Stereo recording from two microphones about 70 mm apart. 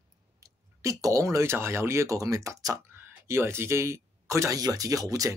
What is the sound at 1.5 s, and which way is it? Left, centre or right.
Speech, right.